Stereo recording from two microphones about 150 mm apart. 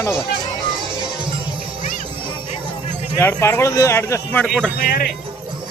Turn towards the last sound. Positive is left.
turn(degrees=70)  # may be behind; listen again after turning